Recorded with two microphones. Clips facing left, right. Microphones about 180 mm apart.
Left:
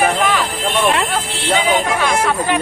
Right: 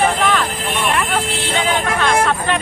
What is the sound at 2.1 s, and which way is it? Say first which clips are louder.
Speech: even; 10° left (ahead or behind).